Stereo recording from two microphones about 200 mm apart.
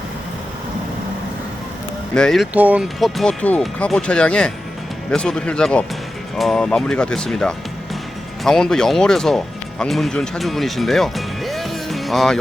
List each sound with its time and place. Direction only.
2.1 s speech: centre (ahead or behind)